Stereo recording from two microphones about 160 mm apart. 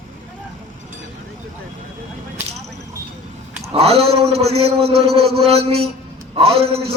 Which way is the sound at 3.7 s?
40° right (ahead or behind).